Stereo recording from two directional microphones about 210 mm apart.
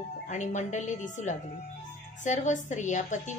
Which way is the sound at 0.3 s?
35° left (ahead or behind).